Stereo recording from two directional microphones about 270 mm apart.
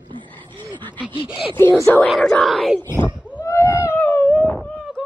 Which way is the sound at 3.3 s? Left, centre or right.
Centre.